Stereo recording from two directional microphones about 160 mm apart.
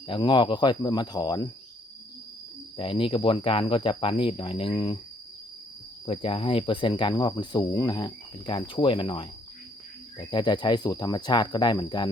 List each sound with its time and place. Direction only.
0.1 s speech: 30° left (ahead or behind)
2.7 s speech: 35° left (ahead or behind)
6.1 s speech: 35° left (ahead or behind)